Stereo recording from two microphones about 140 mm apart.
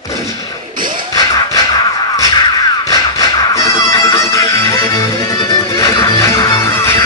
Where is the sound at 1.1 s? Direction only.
25° left (ahead or behind).